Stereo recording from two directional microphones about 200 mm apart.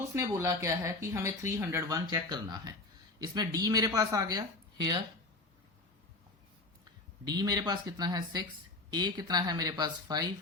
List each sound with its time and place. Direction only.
0.1 s speech: 15° right (ahead or behind)
7.3 s speech: 20° right (ahead or behind)